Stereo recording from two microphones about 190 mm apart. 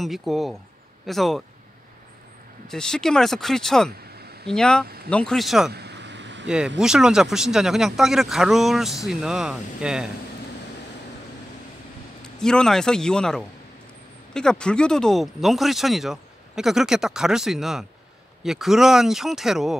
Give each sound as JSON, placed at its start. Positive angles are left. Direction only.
{"t": 0.0, "sound": "speech", "side_deg": 0}
{"t": 2.7, "sound": "speech", "side_deg": 5}
{"t": 4.2, "sound": "a sound", "side_deg": -55}
{"t": 4.5, "sound": "speech", "side_deg": 5}
{"t": 4.8, "sound": "speech", "side_deg": -55}
{"t": 5.1, "sound": "speech", "side_deg": 5}
{"t": 5.7, "sound": "vehicle", "side_deg": -60}
{"t": 6.4, "sound": "speech", "side_deg": -5}
{"t": 12.2, "sound": "speech", "side_deg": 5}